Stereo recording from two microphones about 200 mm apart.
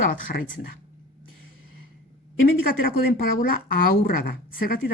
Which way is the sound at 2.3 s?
45° left (ahead or behind).